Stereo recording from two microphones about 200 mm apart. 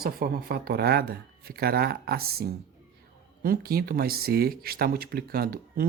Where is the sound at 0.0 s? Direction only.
50° right (ahead or behind).